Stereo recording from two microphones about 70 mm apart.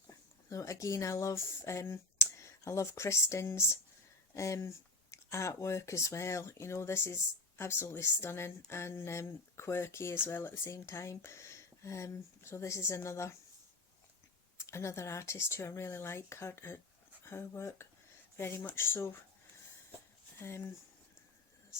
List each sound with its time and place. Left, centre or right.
0.5 s speech: left
14.7 s speech: left
20.4 s speech: left